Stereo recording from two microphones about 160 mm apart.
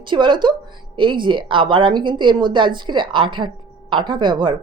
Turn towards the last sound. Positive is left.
turn(degrees=-30)  # may be behind; listen again after turning